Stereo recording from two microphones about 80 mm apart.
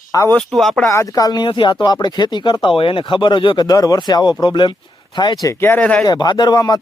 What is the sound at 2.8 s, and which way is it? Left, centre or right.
Speech, left.